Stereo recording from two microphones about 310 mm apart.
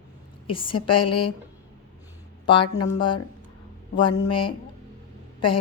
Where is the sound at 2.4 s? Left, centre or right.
Centre.